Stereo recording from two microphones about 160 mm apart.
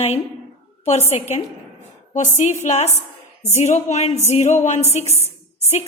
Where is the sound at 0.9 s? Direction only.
40° left (ahead or behind).